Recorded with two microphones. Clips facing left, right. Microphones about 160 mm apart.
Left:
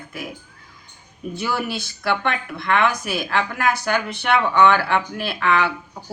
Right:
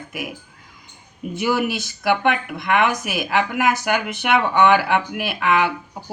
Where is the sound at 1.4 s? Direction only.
20° right (ahead or behind).